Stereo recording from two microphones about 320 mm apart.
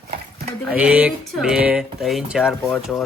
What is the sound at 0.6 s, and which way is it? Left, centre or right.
Speech, centre.